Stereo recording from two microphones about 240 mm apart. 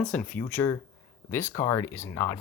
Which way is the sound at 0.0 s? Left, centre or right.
Centre.